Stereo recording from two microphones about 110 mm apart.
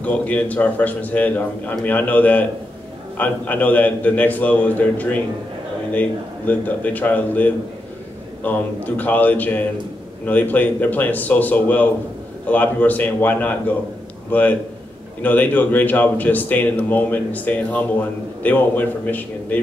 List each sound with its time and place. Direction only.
0.0 s a man's voice: 15° left (ahead or behind)